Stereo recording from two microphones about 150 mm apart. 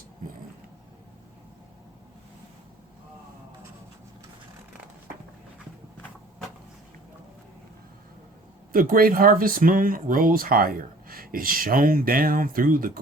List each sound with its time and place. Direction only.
8.7 s speech: 70° right (ahead or behind)